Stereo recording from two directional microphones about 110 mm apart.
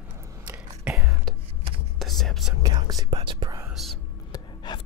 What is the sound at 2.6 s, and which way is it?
Whispering, 40° right (ahead or behind).